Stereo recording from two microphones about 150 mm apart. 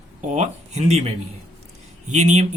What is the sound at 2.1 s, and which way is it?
Speech, 50° right (ahead or behind).